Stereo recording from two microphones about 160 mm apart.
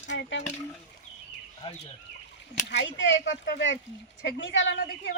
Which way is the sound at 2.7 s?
90° left.